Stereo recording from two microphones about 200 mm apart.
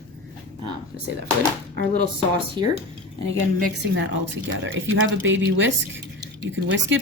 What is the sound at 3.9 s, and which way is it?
Speech, 70° right (ahead or behind).